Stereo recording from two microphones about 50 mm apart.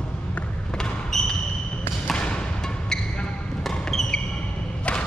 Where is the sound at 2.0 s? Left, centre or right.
Centre.